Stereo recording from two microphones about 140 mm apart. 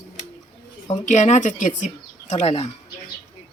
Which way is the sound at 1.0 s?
60° left (ahead or behind).